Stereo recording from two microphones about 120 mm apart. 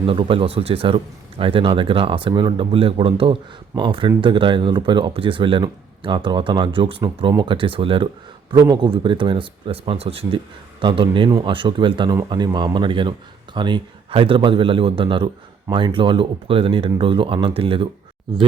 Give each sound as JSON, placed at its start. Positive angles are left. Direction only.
{"t": 0.0, "sound": "speech", "side_deg": -50}
{"t": 8.4, "sound": "speech", "side_deg": -35}